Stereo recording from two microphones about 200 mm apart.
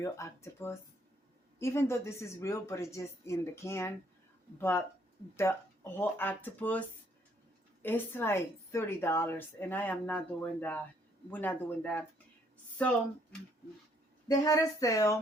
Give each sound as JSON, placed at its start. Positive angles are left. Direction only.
{"t": 0.0, "sound": "a woman's voice", "side_deg": 15}
{"t": 14.3, "sound": "a woman's voice", "side_deg": 15}